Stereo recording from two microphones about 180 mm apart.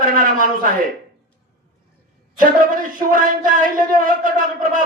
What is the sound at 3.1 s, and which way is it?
Speech, 50° right (ahead or behind).